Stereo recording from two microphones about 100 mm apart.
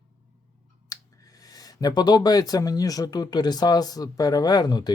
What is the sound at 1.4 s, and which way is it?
Speech, 40° left (ahead or behind).